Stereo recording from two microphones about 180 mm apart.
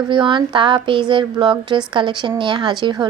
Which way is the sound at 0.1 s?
25° right (ahead or behind).